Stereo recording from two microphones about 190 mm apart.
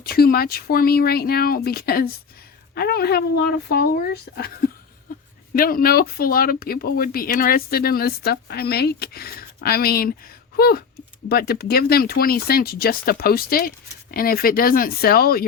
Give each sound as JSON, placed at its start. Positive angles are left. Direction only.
{"t": 0.0, "sound": "speech", "side_deg": 55}